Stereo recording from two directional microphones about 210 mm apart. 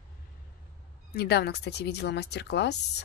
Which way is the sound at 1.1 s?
50° left (ahead or behind).